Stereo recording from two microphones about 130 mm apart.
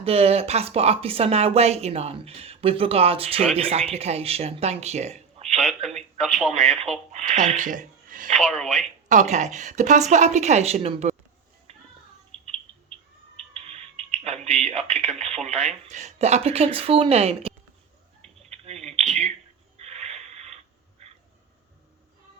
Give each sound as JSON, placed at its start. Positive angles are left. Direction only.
{"t": 0.0, "sound": "speech", "side_deg": -50}
{"t": 5.5, "sound": "telephone", "side_deg": 0}
{"t": 6.0, "sound": "a sound", "side_deg": 0}
{"t": 6.7, "sound": "speech", "side_deg": -55}
{"t": 8.5, "sound": "speech", "side_deg": 0}
{"t": 9.0, "sound": "a woman's voice", "side_deg": -70}
{"t": 11.7, "sound": "music", "side_deg": -50}
{"t": 13.3, "sound": "a sound", "side_deg": -50}
{"t": 15.9, "sound": "speech", "side_deg": -60}
{"t": 18.5, "sound": "a sound", "side_deg": -55}